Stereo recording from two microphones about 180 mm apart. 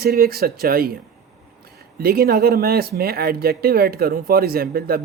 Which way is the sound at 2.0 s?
55° right (ahead or behind).